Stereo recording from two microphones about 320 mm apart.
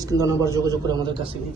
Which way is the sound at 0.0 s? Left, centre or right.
Centre.